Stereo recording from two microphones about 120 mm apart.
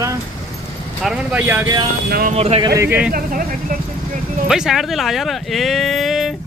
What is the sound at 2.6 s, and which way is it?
Speech, 25° right (ahead or behind).